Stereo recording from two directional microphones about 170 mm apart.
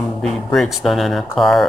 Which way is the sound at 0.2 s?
Centre (ahead or behind).